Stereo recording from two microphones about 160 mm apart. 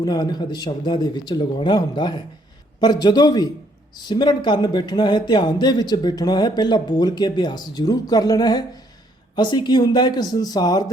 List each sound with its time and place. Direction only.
0.0 s speech: 25° left (ahead or behind)